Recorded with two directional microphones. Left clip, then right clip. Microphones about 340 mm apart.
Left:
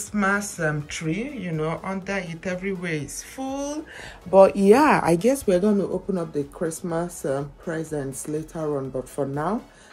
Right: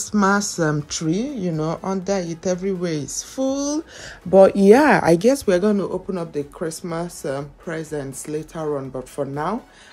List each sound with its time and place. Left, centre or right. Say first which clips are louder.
0.1 s speech: right 4 dB; centre
3.0 s speech: right 8 dB; right
5.1 s speech: right 4 dB; centre